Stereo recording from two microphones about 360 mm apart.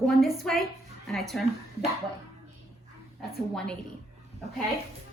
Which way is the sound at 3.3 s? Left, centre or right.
Centre.